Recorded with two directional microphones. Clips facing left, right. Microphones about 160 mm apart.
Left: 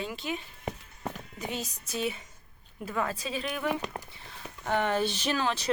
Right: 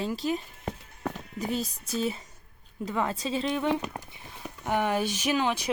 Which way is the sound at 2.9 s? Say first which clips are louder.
Right 3 dB; 25° right (ahead or behind).